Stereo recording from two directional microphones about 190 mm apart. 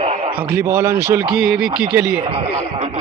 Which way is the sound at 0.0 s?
35° right (ahead or behind).